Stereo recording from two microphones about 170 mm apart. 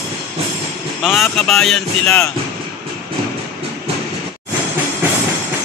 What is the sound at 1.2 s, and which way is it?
Speech, centre (ahead or behind).